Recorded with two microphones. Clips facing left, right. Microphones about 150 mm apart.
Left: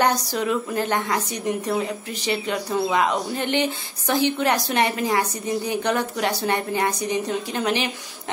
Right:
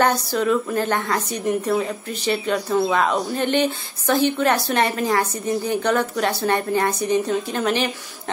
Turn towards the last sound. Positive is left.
turn(degrees=15)  # may be behind; listen again after turning